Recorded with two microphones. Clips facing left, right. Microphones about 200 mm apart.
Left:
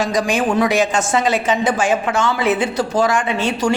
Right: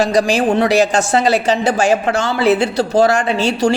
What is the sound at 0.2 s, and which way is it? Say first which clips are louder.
Speech: right 2 dB; 35° right (ahead or behind).